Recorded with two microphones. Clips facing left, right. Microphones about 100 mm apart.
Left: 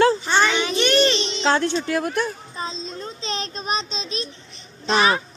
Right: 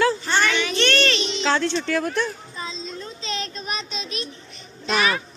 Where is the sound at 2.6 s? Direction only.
35° left (ahead or behind).